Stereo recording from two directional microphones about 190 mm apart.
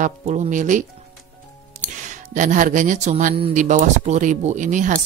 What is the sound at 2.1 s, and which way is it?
Speech, 40° right (ahead or behind).